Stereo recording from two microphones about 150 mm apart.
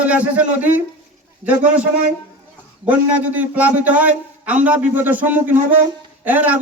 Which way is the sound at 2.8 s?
10° right (ahead or behind).